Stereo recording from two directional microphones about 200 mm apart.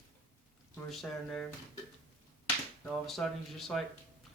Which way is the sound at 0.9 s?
5° left (ahead or behind).